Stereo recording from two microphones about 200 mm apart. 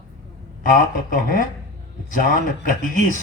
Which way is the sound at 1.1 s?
40° left (ahead or behind).